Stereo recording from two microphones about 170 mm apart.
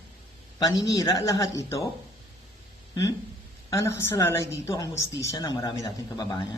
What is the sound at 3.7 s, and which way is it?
A woman's voice, 15° left (ahead or behind).